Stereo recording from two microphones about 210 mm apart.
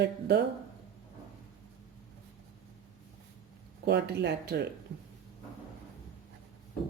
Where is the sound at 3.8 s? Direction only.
55° right (ahead or behind).